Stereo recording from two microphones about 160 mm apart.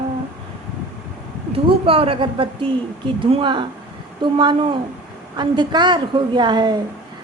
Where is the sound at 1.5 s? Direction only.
35° right (ahead or behind).